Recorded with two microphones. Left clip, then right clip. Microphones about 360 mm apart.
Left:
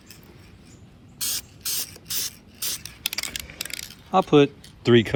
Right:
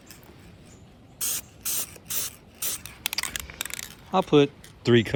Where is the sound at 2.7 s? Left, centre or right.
Centre.